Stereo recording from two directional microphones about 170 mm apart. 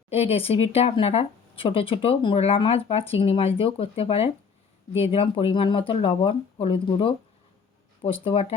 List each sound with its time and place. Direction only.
0.1 s speech: 35° left (ahead or behind)